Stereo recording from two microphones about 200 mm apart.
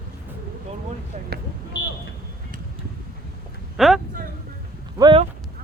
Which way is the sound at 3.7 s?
Centre (ahead or behind).